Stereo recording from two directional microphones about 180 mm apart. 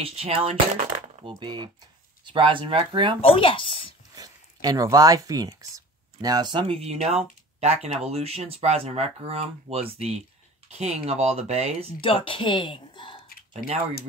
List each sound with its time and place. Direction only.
0.0 s speech: 30° right (ahead or behind)
3.2 s speech: 30° left (ahead or behind)
4.1 s speech: 20° right (ahead or behind); by 11.7 s 35° right (ahead or behind)
12.0 s speech: 30° left (ahead or behind)
13.6 s speech: 50° left (ahead or behind)